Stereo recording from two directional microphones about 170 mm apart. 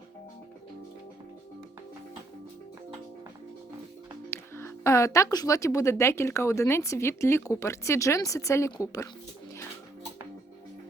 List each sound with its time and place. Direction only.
4.3 s a woman's voice: 15° left (ahead or behind)